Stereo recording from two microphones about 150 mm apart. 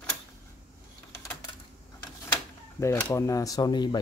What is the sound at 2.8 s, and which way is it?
Speech, 20° left (ahead or behind).